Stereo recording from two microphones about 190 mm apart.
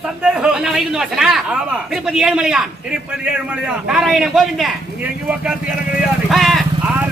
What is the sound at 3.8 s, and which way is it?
Speech, 5° right (ahead or behind).